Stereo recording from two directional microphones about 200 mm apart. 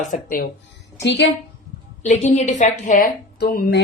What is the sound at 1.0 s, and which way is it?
Speech, 60° left (ahead or behind).